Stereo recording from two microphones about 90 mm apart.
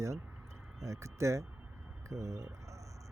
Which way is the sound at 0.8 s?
35° right (ahead or behind).